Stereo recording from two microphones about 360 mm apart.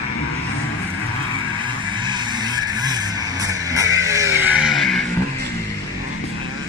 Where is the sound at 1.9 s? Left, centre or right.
Centre.